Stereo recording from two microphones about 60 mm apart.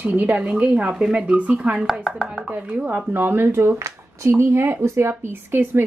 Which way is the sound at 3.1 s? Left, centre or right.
Right.